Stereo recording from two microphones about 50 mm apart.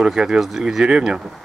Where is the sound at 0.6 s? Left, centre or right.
Centre.